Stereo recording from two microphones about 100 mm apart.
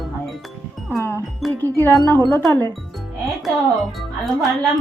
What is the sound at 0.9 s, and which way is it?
Music, 25° left (ahead or behind).